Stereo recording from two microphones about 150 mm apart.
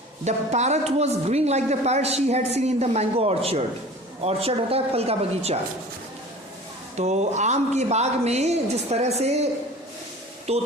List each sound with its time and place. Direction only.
0.3 s a woman's voice: 50° right (ahead or behind)
6.9 s a woman's voice: 50° right (ahead or behind)
10.5 s a woman's voice: 45° right (ahead or behind)